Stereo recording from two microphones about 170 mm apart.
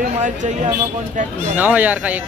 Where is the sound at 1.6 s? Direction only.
10° right (ahead or behind).